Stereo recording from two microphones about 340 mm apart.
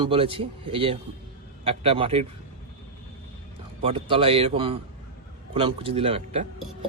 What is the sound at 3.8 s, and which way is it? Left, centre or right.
Speech, centre.